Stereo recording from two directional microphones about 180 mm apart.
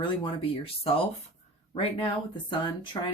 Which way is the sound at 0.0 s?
30° left (ahead or behind).